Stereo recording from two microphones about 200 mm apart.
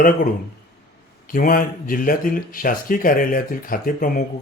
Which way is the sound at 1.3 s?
45° left (ahead or behind).